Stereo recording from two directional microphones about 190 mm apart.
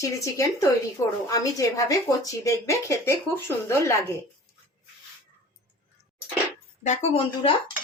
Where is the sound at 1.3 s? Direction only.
15° left (ahead or behind).